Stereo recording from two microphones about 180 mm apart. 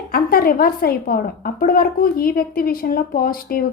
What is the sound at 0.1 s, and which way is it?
A woman's voice, 55° left (ahead or behind).